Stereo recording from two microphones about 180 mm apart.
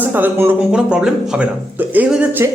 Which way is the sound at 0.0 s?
10° right (ahead or behind).